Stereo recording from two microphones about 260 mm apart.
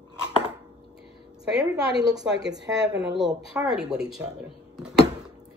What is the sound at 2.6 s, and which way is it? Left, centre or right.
Speech, right.